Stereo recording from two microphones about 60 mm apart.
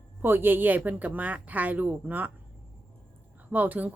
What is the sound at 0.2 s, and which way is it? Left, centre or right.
A woman's voice, right.